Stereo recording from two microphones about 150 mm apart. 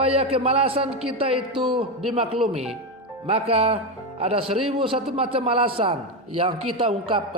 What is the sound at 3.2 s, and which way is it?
A man's voice, 40° right (ahead or behind).